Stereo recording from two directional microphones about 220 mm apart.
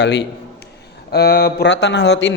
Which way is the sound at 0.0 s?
50° left (ahead or behind).